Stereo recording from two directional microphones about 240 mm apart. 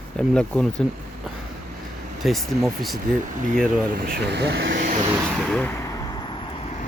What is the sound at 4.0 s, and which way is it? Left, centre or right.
Speech, right.